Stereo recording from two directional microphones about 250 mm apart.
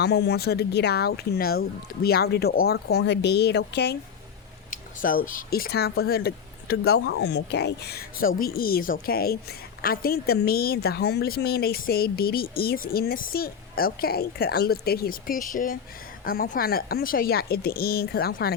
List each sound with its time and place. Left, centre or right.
0.0 s a woman's voice: left